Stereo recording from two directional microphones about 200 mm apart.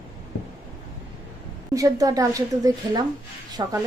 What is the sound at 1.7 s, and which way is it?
Speech, 15° right (ahead or behind).